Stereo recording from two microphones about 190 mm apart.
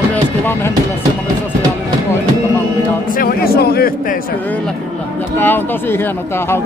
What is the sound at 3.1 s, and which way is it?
Speech, 50° left (ahead or behind).